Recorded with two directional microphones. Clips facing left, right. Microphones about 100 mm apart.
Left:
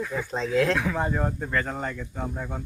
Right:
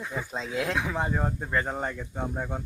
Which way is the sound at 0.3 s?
5° right (ahead or behind).